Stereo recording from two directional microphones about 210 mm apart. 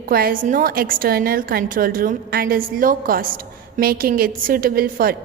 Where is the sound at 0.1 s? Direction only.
45° right (ahead or behind).